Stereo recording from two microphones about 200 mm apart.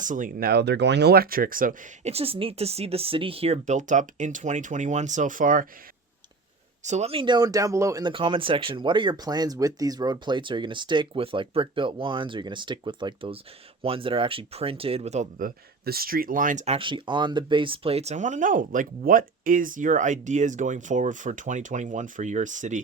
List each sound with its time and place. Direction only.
0.0 s speech: 40° right (ahead or behind)
6.8 s speech: 35° right (ahead or behind)